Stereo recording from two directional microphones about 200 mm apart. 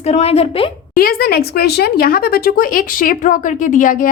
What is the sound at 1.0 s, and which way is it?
Speech, 50° left (ahead or behind).